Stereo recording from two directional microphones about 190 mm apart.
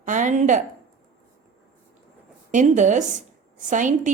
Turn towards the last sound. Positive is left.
turn(degrees=-40)  # may be behind; listen again after turning